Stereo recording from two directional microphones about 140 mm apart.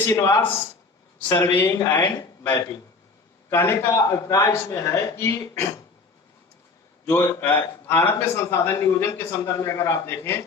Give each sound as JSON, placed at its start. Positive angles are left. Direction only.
{"t": 0.0, "sound": "speech", "side_deg": 20}
{"t": 7.0, "sound": "a man's voice", "side_deg": 15}